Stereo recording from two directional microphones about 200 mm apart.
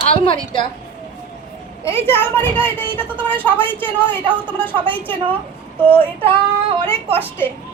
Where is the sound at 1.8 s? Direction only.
10° left (ahead or behind).